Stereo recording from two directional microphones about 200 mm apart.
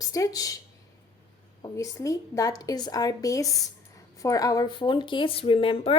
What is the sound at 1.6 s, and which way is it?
Speech, 15° left (ahead or behind).